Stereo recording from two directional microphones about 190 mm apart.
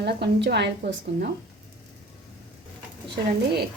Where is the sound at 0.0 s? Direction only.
60° right (ahead or behind).